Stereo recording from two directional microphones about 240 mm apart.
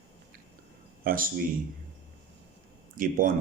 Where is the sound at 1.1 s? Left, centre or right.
Right.